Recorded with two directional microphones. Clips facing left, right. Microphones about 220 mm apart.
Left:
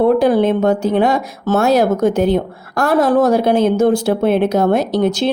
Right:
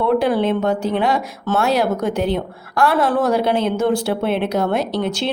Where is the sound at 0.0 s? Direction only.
45° left (ahead or behind).